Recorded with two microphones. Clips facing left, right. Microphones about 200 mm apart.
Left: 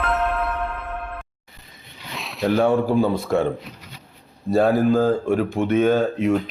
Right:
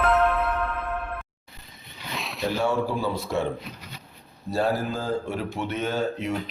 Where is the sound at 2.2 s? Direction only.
Centre (ahead or behind).